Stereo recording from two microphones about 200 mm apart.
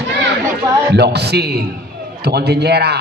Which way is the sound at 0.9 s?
55° right (ahead or behind).